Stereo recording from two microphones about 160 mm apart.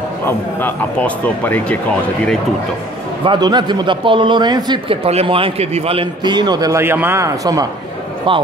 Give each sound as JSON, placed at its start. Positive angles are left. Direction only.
{"t": 0.6, "sound": "speech", "side_deg": 10}
{"t": 3.3, "sound": "a man's voice", "side_deg": -25}
{"t": 8.3, "sound": "speech", "side_deg": -30}